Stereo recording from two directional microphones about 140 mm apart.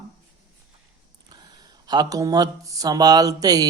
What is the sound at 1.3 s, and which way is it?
Speech, 30° right (ahead or behind).